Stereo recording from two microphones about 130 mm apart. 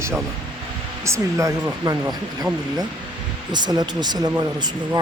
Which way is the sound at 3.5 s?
35° right (ahead or behind).